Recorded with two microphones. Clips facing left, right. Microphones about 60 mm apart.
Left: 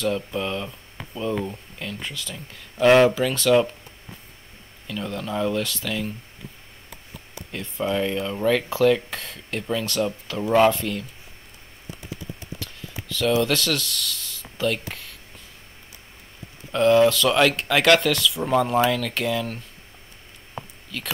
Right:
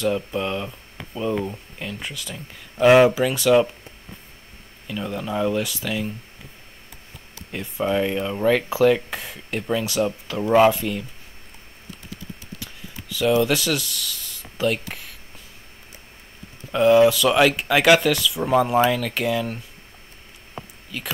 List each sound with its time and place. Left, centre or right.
0.0 s speech: centre
4.8 s speech: centre
7.5 s speech: centre
12.5 s a sound: centre
13.4 s speech: centre
16.7 s speech: centre
20.9 s speech: centre